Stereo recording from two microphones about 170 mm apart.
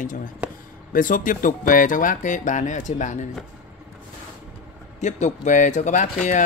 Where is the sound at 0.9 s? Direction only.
50° left (ahead or behind).